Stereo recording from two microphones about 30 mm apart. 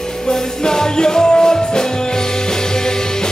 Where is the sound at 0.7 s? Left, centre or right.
Left.